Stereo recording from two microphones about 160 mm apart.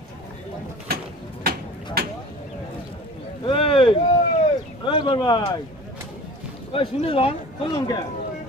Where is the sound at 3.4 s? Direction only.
35° left (ahead or behind).